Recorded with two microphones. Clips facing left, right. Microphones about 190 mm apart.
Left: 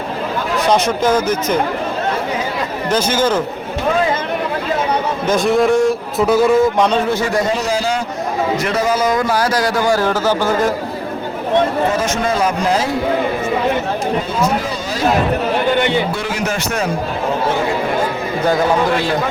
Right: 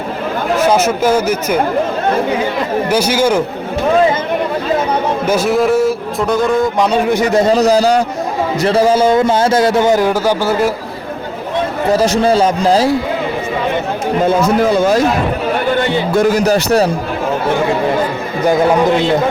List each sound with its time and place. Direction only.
0.7 s speech: 5° right (ahead or behind)
2.9 s speech: 10° right (ahead or behind)
5.2 s a man's voice: 5° right (ahead or behind)
6.9 s speech: 15° right (ahead or behind)
7.5 s a man's voice: 40° right (ahead or behind); by 10.7 s 10° right (ahead or behind)
11.9 s speech: 35° right (ahead or behind)
14.6 s speech: 50° right (ahead or behind)
16.1 s speech: 40° right (ahead or behind)
18.4 s a man's voice: 20° right (ahead or behind)